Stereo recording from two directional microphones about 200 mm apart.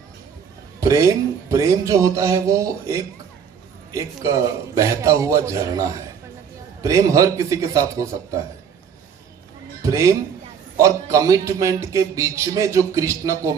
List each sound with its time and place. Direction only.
0.8 s a man's voice: 15° right (ahead or behind)
9.8 s a man's voice: 15° right (ahead or behind)